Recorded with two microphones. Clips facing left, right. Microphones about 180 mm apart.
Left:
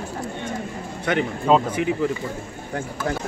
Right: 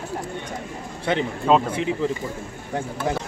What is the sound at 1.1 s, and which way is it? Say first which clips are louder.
Speech: left 1 dB; 25° right (ahead or behind).